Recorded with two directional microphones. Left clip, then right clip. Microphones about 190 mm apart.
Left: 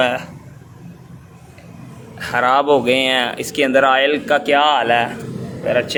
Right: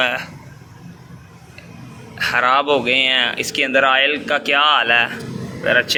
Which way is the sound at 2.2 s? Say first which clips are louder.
Even; 20° left (ahead or behind).